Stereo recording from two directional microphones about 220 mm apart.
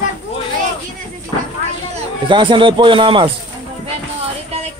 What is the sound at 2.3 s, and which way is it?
A man's voice, 20° right (ahead or behind).